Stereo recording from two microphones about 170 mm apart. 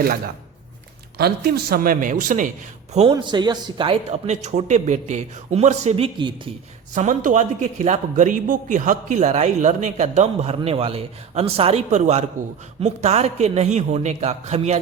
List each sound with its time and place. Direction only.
1.2 s a man's voice: 65° right (ahead or behind); by 2.5 s 50° right (ahead or behind)
3.1 s a man's voice: 25° right (ahead or behind)
4.3 s a man's voice: 45° right (ahead or behind)
6.9 s a man's voice: 50° right (ahead or behind)